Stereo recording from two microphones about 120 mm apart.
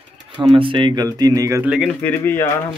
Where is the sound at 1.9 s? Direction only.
20° left (ahead or behind).